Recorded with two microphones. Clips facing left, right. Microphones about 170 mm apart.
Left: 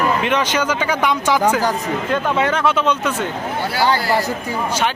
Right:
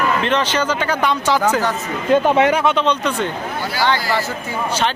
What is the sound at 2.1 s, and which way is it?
Speech, 20° right (ahead or behind).